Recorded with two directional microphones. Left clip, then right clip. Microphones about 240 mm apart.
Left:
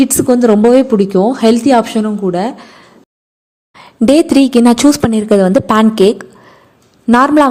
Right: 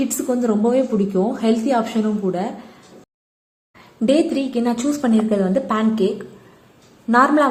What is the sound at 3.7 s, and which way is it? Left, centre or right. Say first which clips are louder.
A woman's voice: left 8 dB; left.